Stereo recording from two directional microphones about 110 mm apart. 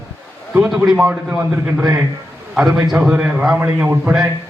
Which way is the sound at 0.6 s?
5° right (ahead or behind).